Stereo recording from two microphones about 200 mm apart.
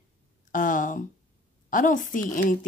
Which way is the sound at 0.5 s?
40° left (ahead or behind).